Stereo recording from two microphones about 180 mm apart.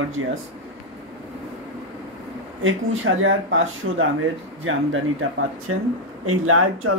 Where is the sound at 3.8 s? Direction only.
75° right (ahead or behind).